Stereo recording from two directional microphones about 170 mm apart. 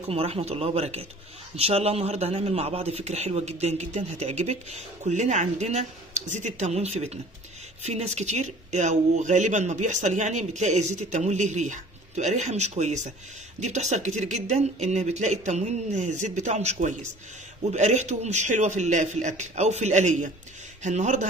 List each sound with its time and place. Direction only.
0.1 s speech: 35° right (ahead or behind)